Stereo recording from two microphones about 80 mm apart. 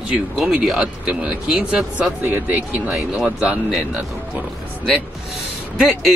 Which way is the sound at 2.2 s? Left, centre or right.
Right.